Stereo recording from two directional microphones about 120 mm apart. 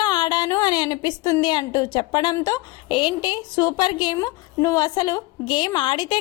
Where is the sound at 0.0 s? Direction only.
40° left (ahead or behind).